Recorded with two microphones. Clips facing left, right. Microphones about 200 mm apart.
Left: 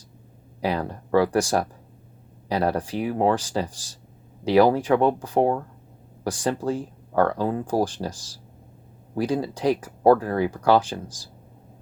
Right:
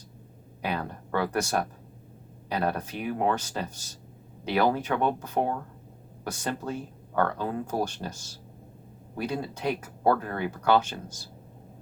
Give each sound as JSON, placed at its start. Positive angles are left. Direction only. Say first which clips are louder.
{"t": 0.6, "sound": "speech", "louder": "left 6 dB", "side_deg": 35}
{"t": 9.1, "sound": "speech", "louder": "left 7 dB", "side_deg": 35}